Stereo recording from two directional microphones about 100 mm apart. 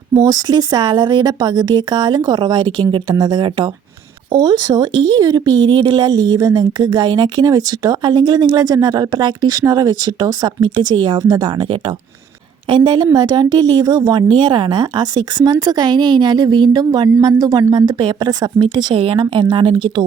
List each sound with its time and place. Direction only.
0.1 s a woman's voice: 40° right (ahead or behind)
14.3 s a woman's voice: 55° right (ahead or behind)
18.9 s a woman's voice: 60° right (ahead or behind)